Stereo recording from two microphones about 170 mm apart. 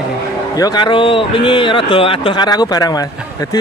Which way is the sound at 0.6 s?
25° left (ahead or behind).